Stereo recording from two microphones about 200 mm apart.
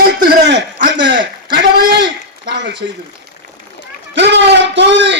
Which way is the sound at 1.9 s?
60° right (ahead or behind).